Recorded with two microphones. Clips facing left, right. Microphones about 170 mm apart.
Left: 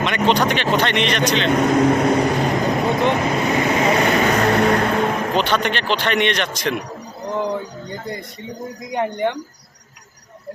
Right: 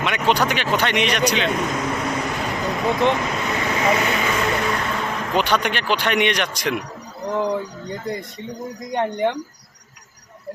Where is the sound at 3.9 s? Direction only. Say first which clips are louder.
Left 5 dB; 40° left (ahead or behind).